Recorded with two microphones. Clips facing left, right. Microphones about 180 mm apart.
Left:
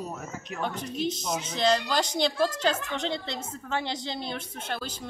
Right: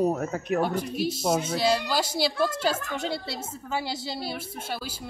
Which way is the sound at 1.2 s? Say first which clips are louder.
Right 7 dB; 55° right (ahead or behind).